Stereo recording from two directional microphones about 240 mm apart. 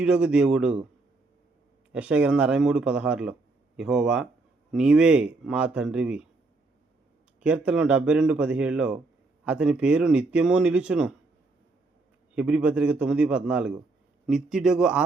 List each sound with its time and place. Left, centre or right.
0.0 s speech: centre
1.9 s speech: centre
7.3 s speech: centre
12.3 s speech: centre